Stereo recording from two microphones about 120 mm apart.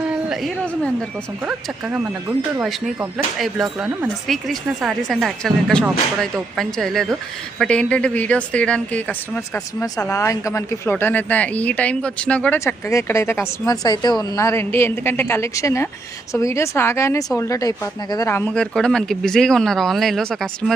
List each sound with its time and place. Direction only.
0.1 s a sound: 5° right (ahead or behind)
0.6 s speech: 10° left (ahead or behind)
1.5 s speech: 10° right (ahead or behind)
3.3 s speech: centre (ahead or behind)
10.1 s speech: 25° left (ahead or behind); by 12.5 s 10° left (ahead or behind)
12.5 s speech: 25° left (ahead or behind)
18.3 s speech: 10° left (ahead or behind)